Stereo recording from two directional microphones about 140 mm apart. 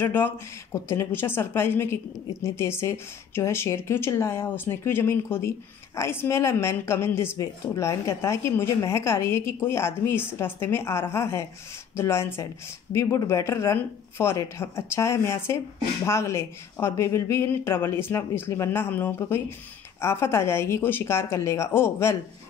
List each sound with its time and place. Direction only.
0.0 s a woman's voice: 15° left (ahead or behind)